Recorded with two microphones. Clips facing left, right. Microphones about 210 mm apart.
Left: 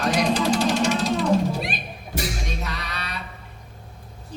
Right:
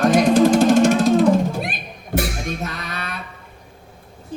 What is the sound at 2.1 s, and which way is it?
Music, 55° right (ahead or behind).